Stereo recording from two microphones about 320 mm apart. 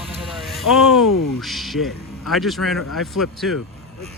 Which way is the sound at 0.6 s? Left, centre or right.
Centre.